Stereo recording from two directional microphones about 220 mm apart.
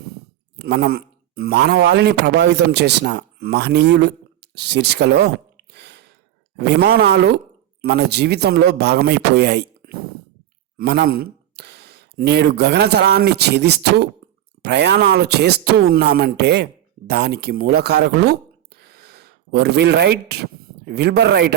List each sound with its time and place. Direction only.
0.6 s speech: 45° right (ahead or behind)
5.7 s a sound: 50° right (ahead or behind)
6.6 s speech: 50° right (ahead or behind)